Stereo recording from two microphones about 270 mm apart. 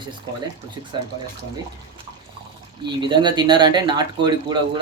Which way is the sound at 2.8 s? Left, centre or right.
Centre.